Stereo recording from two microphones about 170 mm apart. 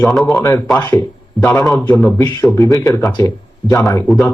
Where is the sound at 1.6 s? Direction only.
Centre (ahead or behind).